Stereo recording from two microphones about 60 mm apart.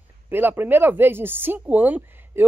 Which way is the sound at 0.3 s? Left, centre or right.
Right.